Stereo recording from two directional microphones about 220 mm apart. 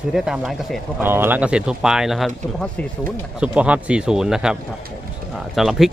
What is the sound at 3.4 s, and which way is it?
Speech, 5° right (ahead or behind).